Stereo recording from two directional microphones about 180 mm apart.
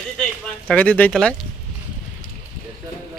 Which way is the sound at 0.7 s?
10° left (ahead or behind).